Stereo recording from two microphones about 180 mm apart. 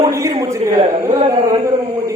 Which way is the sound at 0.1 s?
15° right (ahead or behind).